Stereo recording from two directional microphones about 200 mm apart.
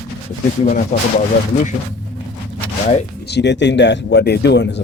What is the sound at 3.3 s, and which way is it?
Speech, 60° left (ahead or behind).